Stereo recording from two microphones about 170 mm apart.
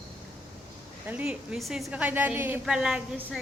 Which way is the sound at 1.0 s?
10° right (ahead or behind).